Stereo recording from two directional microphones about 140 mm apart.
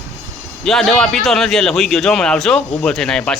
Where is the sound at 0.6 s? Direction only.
Centre (ahead or behind).